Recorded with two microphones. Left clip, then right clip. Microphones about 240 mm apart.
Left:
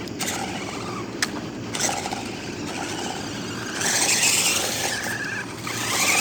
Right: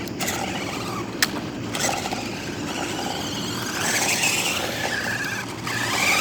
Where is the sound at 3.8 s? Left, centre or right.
Centre; by 6.1 s left.